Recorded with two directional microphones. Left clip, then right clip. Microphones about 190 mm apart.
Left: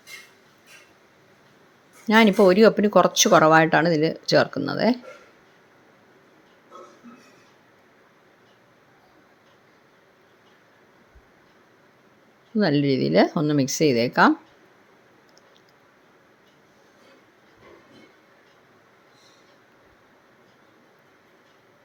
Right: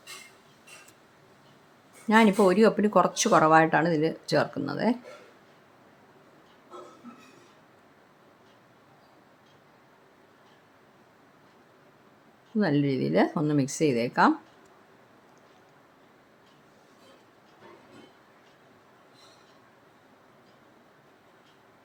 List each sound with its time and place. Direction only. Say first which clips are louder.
2.0 s speech: left 5 dB; 20° left (ahead or behind)
12.5 s speech: left 5 dB; 20° left (ahead or behind)